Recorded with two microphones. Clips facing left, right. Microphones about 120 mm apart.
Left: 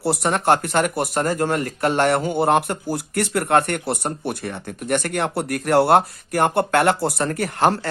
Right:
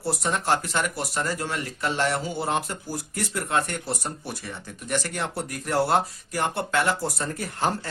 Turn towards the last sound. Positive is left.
turn(degrees=75)  # may be behind; listen again after turning